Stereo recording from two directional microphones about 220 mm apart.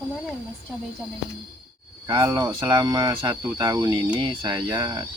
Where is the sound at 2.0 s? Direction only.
15° right (ahead or behind).